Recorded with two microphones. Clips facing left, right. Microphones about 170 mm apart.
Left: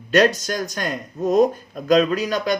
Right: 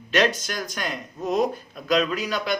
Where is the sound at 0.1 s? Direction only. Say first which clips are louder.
Left 5 dB; 45° left (ahead or behind).